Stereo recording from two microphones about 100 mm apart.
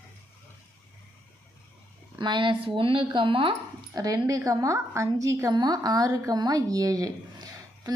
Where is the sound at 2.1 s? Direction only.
50° right (ahead or behind).